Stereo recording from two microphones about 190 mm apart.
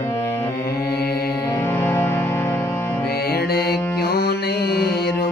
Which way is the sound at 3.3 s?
55° left (ahead or behind).